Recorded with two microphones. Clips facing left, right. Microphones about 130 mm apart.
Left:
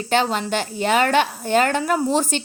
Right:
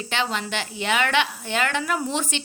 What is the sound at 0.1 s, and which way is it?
A woman's voice, 45° left (ahead or behind).